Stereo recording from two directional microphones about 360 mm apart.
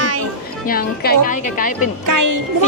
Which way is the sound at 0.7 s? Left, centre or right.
Left.